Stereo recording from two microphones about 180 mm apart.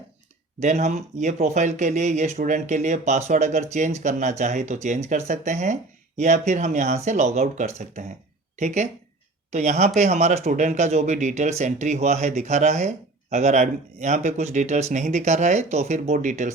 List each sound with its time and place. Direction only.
0.6 s speech: 40° right (ahead or behind)